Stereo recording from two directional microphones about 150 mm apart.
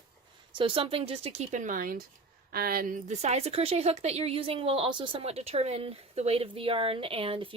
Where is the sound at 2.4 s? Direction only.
80° right.